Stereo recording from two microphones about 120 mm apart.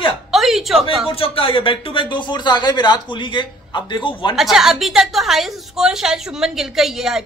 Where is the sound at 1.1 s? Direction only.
50° left (ahead or behind).